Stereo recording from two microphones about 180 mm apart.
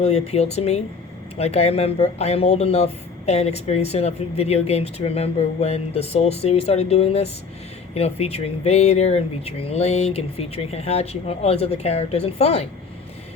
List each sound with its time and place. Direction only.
0.0 s speech: 35° left (ahead or behind)